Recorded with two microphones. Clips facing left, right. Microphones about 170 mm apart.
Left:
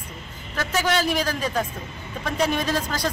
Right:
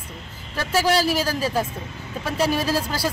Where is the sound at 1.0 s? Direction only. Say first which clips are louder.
Right 2 dB; 5° right (ahead or behind).